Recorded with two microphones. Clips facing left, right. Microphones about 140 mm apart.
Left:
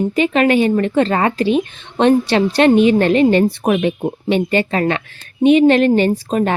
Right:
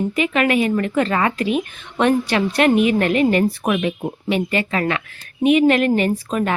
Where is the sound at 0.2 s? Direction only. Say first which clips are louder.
Left 5 dB; 30° left (ahead or behind).